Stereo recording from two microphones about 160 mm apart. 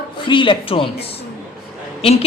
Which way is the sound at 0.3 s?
30° left (ahead or behind).